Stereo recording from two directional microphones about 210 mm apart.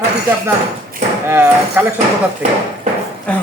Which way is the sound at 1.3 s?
10° right (ahead or behind).